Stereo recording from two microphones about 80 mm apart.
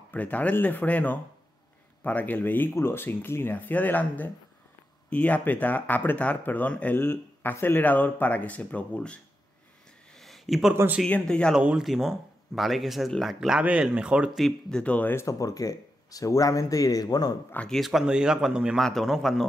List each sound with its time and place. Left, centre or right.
0.1 s speech: centre
10.1 s a sound: centre
11.1 s speech: centre
11.8 s speech: centre
14.8 s speech: centre
15.1 s speech: left
17.6 s speech: centre
18.8 s speech: centre